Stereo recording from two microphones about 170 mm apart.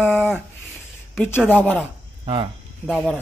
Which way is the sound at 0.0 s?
10° left (ahead or behind).